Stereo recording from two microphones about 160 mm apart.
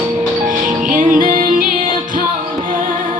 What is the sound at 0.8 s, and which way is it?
Music, 55° right (ahead or behind).